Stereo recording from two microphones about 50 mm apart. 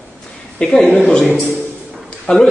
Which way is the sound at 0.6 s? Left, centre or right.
Centre.